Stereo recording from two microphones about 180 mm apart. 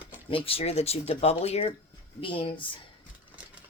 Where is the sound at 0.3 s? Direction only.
30° left (ahead or behind).